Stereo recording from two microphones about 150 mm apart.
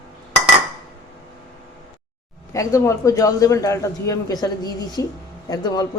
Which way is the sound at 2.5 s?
20° left (ahead or behind).